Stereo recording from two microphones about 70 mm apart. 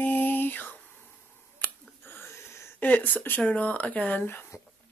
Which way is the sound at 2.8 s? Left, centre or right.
Left.